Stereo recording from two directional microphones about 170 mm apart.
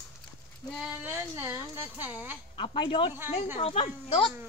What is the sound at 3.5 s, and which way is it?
Speech, 30° left (ahead or behind).